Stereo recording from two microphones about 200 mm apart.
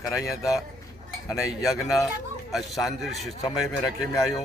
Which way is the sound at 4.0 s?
20° left (ahead or behind).